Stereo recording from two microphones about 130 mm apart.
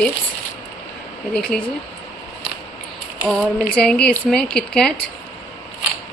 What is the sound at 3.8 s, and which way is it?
Speech, 5° left (ahead or behind).